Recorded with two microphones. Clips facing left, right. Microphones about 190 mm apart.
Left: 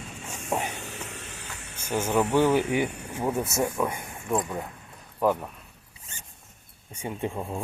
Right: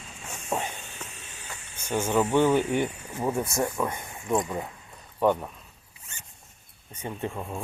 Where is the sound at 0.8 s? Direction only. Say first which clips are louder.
Left 5 dB; 75° left (ahead or behind).